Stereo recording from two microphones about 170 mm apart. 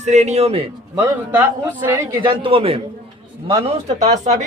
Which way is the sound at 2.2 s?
30° right (ahead or behind).